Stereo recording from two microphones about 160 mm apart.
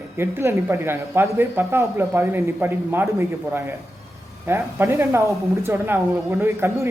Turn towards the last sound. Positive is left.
turn(degrees=-20)  # may be behind; listen again after turning